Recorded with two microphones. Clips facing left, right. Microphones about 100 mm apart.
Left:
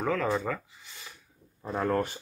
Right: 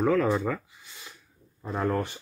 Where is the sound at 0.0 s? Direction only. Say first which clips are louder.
Right 4 dB; 5° right (ahead or behind).